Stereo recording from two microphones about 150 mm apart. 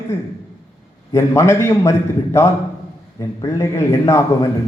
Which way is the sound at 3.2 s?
20° left (ahead or behind).